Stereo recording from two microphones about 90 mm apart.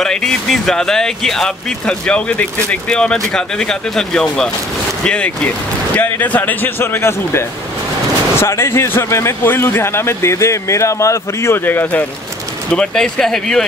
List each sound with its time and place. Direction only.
0.0 s speech: 5° left (ahead or behind); by 12.0 s 25° left (ahead or behind)
12.7 s speech: 5° left (ahead or behind)